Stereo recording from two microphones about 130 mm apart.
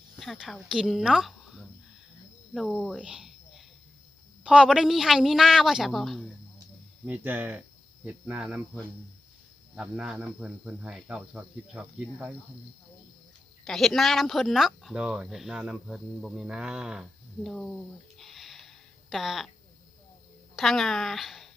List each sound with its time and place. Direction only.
0.2 s speech: centre (ahead or behind)
7.0 s speech: 15° right (ahead or behind)
9.7 s speech: 5° right (ahead or behind)
13.7 s speech: centre (ahead or behind)
18.2 s a sound: centre (ahead or behind)
20.6 s speech: centre (ahead or behind)